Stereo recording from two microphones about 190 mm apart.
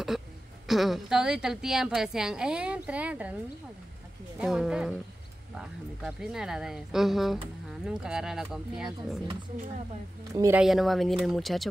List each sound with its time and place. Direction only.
0.7 s a woman's voice: centre (ahead or behind)
4.4 s a woman's voice: 5° right (ahead or behind)
10.3 s speech: 15° right (ahead or behind)
10.6 s a woman's voice: centre (ahead or behind)